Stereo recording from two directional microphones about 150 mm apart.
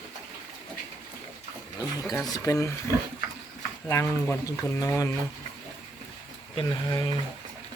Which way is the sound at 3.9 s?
20° left (ahead or behind).